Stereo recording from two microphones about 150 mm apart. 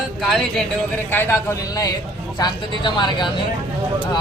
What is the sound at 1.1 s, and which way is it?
A man's voice, 15° left (ahead or behind).